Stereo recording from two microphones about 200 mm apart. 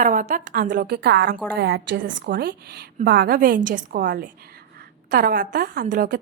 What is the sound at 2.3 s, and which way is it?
A woman's voice, 50° right (ahead or behind).